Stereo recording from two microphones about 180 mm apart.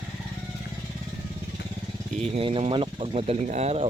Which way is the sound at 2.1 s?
35° right (ahead or behind).